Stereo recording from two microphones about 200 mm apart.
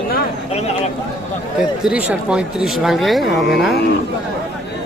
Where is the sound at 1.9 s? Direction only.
5° right (ahead or behind).